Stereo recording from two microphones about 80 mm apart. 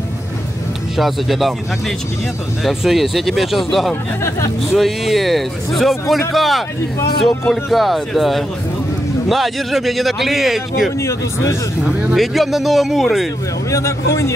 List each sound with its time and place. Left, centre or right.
0.9 s a man's voice: centre
4.2 s a man's voice: left
4.7 s a man's voice: centre
11.0 s a man's voice: left
12.2 s a man's voice: centre
13.7 s a man's voice: left